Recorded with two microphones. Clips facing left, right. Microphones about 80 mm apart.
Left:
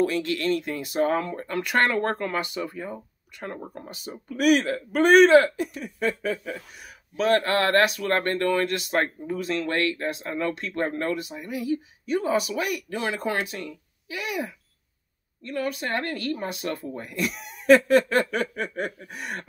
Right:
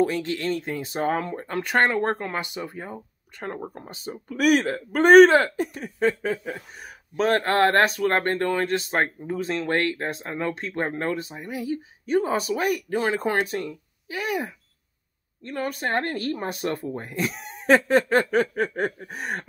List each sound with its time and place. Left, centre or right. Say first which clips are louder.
0.0 s speech: even; right
16.8 s speech: right 1 dB; right